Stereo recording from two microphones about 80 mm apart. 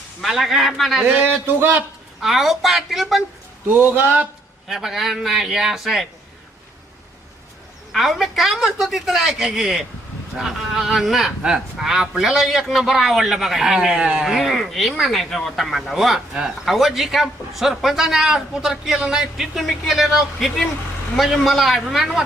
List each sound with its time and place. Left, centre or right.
0.2 s speech: centre
1.0 s a man's voice: right
2.2 s speech: centre
3.7 s speech: right
4.7 s speech: centre
7.9 s speech: centre